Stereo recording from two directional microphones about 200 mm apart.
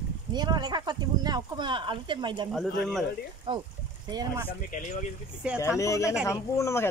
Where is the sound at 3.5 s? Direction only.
25° right (ahead or behind).